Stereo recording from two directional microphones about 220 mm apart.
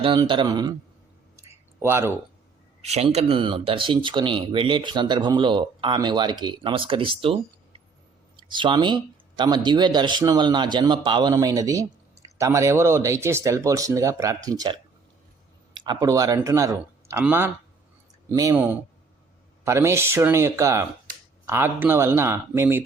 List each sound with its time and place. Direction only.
0.0 s speech: 20° right (ahead or behind)
1.8 s speech: 10° right (ahead or behind)
2.8 s speech: 30° right (ahead or behind)
8.4 s speech: 20° right (ahead or behind)